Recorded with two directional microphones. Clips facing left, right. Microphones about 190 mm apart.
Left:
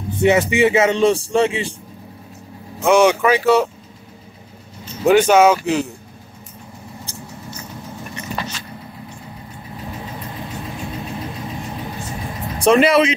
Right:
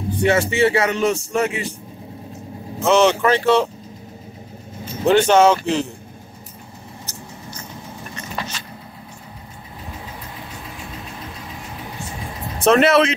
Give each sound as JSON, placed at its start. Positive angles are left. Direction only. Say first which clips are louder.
{"t": 0.1, "sound": "speech", "louder": "left 3 dB", "side_deg": 20}
{"t": 2.8, "sound": "speech", "louder": "left 2 dB", "side_deg": 10}
{"t": 5.0, "sound": "speech", "louder": "left 1 dB", "side_deg": 10}
{"t": 12.5, "sound": "speech", "louder": "left 1 dB", "side_deg": 0}